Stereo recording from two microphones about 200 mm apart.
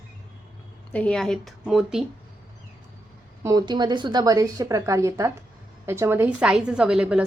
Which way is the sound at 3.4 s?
20° right (ahead or behind).